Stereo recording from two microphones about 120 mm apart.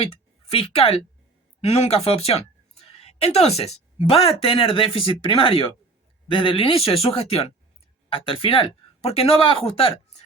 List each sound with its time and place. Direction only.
0.0 s speech: 55° left (ahead or behind)